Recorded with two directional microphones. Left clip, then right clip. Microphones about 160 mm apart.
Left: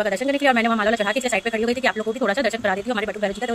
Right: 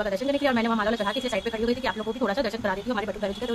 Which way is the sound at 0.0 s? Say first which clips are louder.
Left 5 dB; 15° left (ahead or behind).